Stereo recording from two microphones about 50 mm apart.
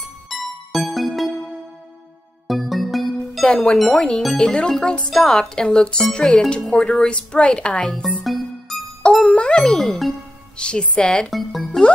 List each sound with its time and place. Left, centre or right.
0.3 s music: centre
2.4 s music: centre
3.4 s a woman's voice: left
3.7 s speech: centre
4.4 s a woman's voice: centre
8.2 s music: centre
9.3 s jingle: centre
9.8 s speech: centre
10.6 s a woman's voice: centre
11.2 s speech: centre